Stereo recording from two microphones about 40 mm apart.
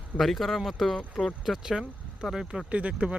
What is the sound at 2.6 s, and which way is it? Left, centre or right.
Speech, right.